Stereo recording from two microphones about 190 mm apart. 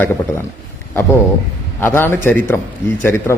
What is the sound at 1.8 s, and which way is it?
Speech, 10° left (ahead or behind).